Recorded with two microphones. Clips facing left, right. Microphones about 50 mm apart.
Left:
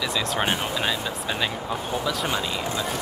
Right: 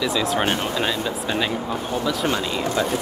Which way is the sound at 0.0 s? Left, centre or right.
Centre.